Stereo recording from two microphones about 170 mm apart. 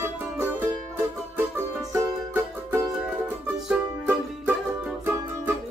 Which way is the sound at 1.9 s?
15° right (ahead or behind).